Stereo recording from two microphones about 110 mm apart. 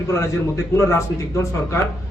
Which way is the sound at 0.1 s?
25° left (ahead or behind).